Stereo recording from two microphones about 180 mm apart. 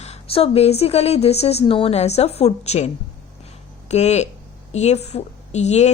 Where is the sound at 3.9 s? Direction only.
40° left (ahead or behind).